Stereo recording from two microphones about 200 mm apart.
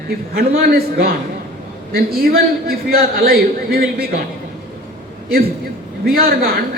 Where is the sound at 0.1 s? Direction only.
50° right (ahead or behind).